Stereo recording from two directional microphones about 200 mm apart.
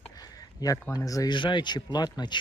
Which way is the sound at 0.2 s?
20° left (ahead or behind).